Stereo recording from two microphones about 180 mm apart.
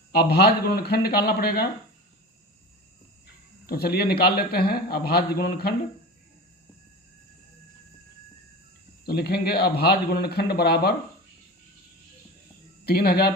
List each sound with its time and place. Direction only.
0.3 s speech: 60° left (ahead or behind)
3.7 s speech: 60° left (ahead or behind)
9.0 s speech: 60° left (ahead or behind)
12.8 s speech: 60° left (ahead or behind)